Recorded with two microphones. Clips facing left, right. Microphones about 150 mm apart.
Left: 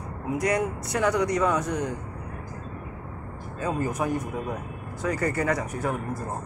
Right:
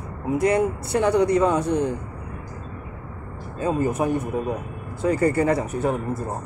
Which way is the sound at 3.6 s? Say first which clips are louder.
Right 5 dB; 25° right (ahead or behind).